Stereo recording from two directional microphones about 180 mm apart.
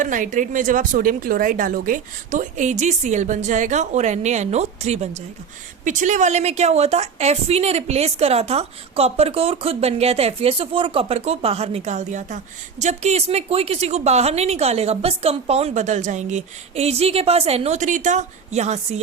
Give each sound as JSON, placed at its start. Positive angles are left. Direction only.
{"t": 0.0, "sound": "a woman's voice", "side_deg": -45}